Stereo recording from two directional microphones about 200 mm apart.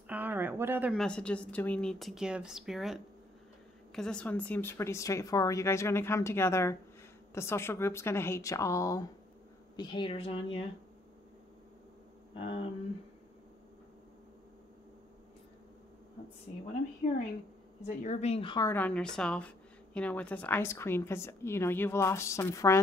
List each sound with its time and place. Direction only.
0.1 s a sound: 10° right (ahead or behind)
0.9 s a woman's voice: 5° left (ahead or behind); by 10.6 s 30° left (ahead or behind)
17.0 s speech: 35° left (ahead or behind)
18.7 s a woman's voice: 10° left (ahead or behind)